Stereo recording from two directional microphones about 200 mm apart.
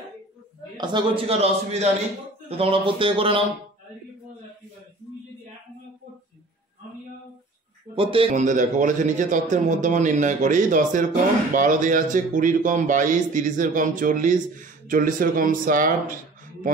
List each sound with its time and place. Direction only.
0.7 s a man's voice: 25° right (ahead or behind)
7.9 s a man's voice: 25° right (ahead or behind)